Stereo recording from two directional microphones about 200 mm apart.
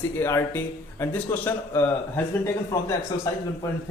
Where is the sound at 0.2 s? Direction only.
10° left (ahead or behind).